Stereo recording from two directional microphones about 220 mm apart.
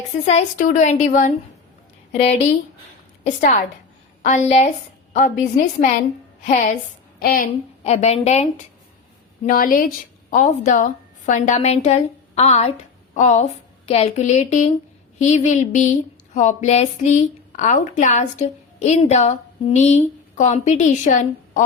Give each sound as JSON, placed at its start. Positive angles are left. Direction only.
{"t": 0.3, "sound": "speech", "side_deg": 30}
{"t": 3.2, "sound": "a woman's voice", "side_deg": 30}
{"t": 7.9, "sound": "a woman's voice", "side_deg": 30}